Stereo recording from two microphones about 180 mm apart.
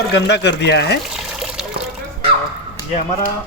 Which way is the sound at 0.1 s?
70° left (ahead or behind).